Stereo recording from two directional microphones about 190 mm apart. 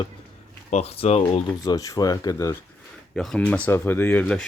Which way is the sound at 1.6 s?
20° left (ahead or behind).